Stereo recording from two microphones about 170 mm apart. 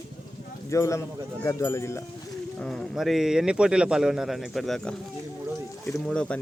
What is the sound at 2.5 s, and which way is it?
Speech, 5° left (ahead or behind).